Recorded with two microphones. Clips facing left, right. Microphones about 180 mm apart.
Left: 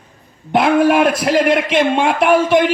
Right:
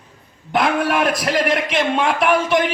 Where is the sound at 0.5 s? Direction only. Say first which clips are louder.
Left 6 dB; 25° left (ahead or behind).